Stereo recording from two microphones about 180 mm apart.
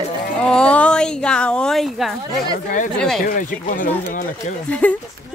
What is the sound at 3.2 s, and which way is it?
Speech, 50° left (ahead or behind).